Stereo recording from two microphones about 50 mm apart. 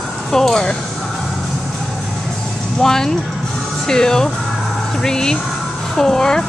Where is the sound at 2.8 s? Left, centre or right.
Centre.